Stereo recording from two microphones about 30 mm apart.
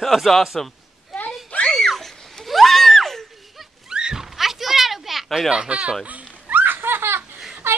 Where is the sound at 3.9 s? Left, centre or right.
Right.